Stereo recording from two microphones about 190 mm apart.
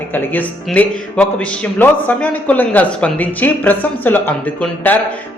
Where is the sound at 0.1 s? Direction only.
10° left (ahead or behind).